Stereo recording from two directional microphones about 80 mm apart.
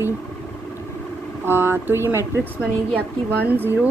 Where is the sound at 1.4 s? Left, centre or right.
Right.